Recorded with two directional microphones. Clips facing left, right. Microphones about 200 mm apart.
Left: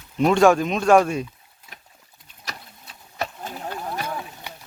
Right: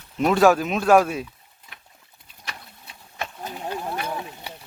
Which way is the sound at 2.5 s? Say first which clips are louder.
Left 2 dB; 40° left (ahead or behind).